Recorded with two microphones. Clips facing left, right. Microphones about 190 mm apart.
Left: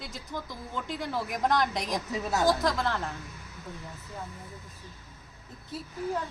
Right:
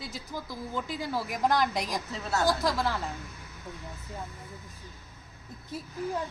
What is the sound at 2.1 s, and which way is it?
Speech, 15° left (ahead or behind).